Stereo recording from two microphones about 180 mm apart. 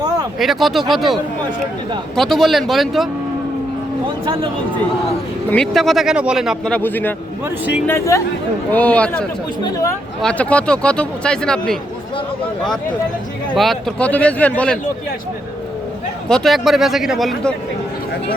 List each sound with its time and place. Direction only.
0.3 s speech: centre (ahead or behind)
5.5 s speech: 5° left (ahead or behind)
13.5 s speech: centre (ahead or behind)
16.3 s speech: centre (ahead or behind)